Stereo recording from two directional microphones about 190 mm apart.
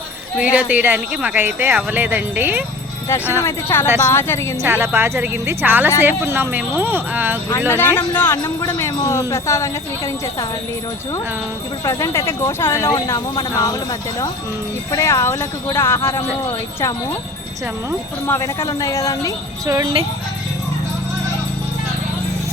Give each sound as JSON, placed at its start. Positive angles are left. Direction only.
{"t": 0.5, "sound": "speech", "side_deg": -10}
{"t": 3.4, "sound": "speech", "side_deg": 15}
{"t": 4.6, "sound": "speech", "side_deg": -10}
{"t": 7.7, "sound": "speech", "side_deg": 10}
{"t": 11.9, "sound": "speech", "side_deg": 15}
{"t": 14.9, "sound": "speech", "side_deg": 15}
{"t": 18.3, "sound": "speech", "side_deg": 15}
{"t": 19.6, "sound": "speech", "side_deg": -15}